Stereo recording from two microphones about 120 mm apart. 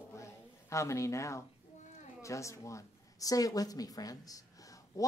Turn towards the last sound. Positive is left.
turn(degrees=30)  # may be behind; listen again after turning